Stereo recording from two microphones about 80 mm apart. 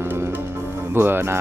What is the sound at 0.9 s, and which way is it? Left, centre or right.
Speech, right.